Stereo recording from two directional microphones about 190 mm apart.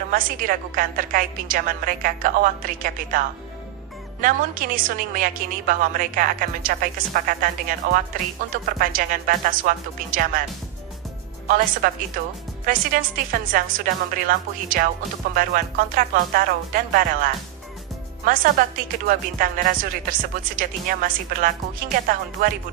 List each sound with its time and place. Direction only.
0.1 s a woman's voice: 45° right (ahead or behind)
11.4 s a woman's voice: 45° right (ahead or behind)